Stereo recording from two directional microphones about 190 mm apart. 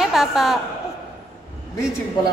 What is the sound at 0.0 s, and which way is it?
Speech, centre (ahead or behind).